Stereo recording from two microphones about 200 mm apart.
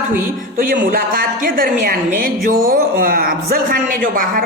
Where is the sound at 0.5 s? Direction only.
45° right (ahead or behind).